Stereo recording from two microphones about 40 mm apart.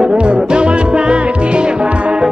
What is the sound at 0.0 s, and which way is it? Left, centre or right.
Music, right.